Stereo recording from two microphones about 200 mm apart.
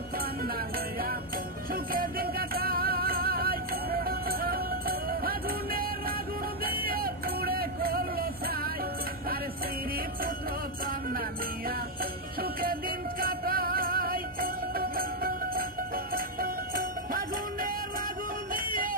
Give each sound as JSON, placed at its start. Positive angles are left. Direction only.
{"t": 1.7, "sound": "music", "side_deg": -45}
{"t": 6.6, "sound": "vehicle", "side_deg": -50}
{"t": 13.1, "sound": "music", "side_deg": -45}